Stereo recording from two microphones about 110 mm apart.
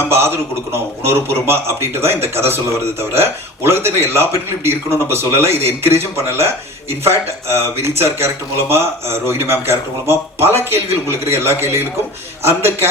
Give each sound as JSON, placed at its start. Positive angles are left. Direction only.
{"t": 0.1, "sound": "a man's voice", "side_deg": -20}